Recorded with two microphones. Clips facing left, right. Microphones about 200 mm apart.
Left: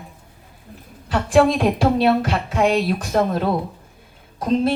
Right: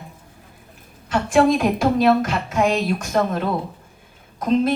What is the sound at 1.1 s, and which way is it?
A woman's voice, 35° left (ahead or behind).